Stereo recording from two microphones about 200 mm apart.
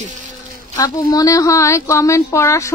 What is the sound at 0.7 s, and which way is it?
A woman's voice, 20° left (ahead or behind).